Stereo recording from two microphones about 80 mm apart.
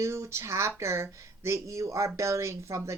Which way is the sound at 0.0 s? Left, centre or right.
Right.